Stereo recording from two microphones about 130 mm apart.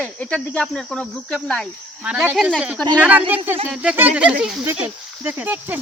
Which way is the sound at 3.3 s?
15° right (ahead or behind).